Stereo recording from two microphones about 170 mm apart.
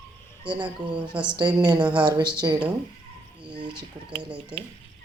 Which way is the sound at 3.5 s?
30° right (ahead or behind).